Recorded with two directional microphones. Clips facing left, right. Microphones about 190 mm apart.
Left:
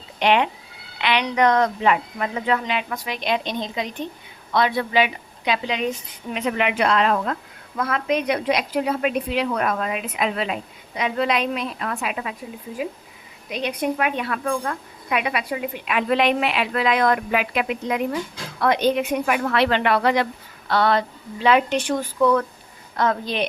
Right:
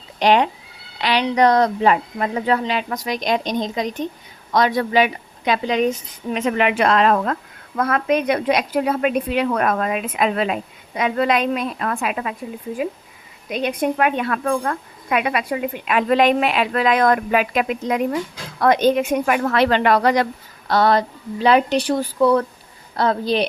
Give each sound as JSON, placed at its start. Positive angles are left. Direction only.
{"t": 0.2, "sound": "a woman's voice", "side_deg": -35}
{"t": 13.5, "sound": "a woman's voice", "side_deg": -45}